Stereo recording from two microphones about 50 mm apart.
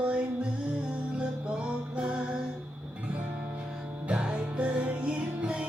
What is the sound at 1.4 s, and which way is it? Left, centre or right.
Music, right.